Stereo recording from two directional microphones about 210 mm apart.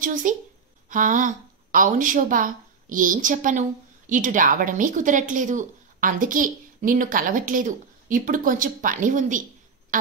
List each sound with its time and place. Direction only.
0.0 s a woman's voice: 40° right (ahead or behind)